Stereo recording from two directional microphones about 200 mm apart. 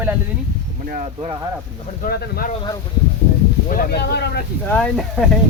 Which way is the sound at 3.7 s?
50° left (ahead or behind).